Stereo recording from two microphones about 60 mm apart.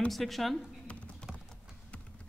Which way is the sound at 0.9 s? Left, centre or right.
Left.